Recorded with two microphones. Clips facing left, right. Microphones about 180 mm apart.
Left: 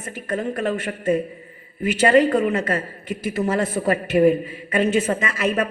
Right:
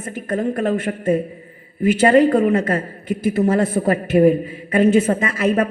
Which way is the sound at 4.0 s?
30° right (ahead or behind).